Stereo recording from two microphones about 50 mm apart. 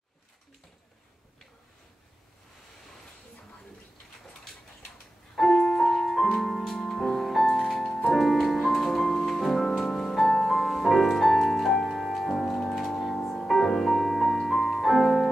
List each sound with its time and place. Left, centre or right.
5.5 s music: centre
5.8 s music: centre